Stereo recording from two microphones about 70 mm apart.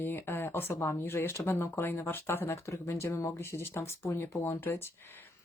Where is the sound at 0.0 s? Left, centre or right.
Left.